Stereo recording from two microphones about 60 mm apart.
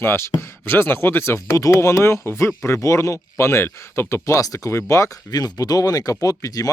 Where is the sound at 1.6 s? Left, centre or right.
Left.